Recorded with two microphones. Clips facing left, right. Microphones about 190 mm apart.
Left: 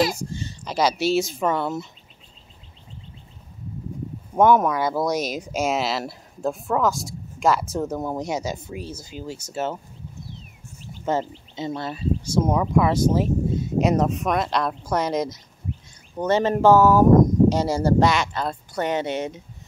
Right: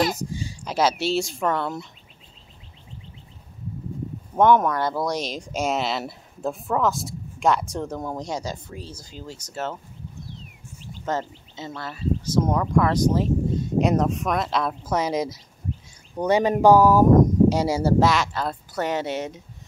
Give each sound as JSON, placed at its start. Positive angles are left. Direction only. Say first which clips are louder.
{"t": 0.1, "sound": "speech", "louder": "right 1 dB", "side_deg": -15}
{"t": 4.4, "sound": "speech", "louder": "left 1 dB", "side_deg": 5}
{"t": 11.1, "sound": "speech", "louder": "left 3 dB", "side_deg": 15}
{"t": 12.4, "sound": "speech", "louder": "left 2 dB", "side_deg": 5}